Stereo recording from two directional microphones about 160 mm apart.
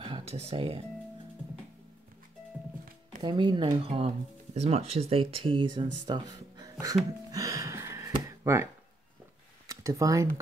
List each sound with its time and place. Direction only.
0.0 s speech: 40° right (ahead or behind)
3.2 s speech: 30° right (ahead or behind)
7.2 s music: 20° right (ahead or behind)
9.7 s speech: 20° right (ahead or behind)